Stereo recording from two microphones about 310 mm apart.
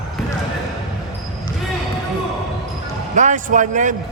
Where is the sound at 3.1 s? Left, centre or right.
Right.